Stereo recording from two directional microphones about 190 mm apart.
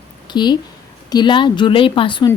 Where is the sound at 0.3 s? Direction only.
25° left (ahead or behind).